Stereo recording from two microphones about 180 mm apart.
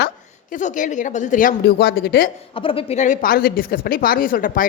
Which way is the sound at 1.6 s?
65° left (ahead or behind).